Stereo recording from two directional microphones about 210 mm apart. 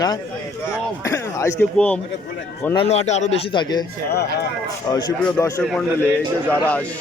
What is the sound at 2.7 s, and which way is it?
A man's voice, 25° left (ahead or behind).